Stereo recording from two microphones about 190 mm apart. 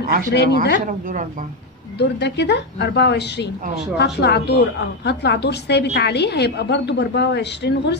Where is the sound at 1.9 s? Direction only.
60° left (ahead or behind).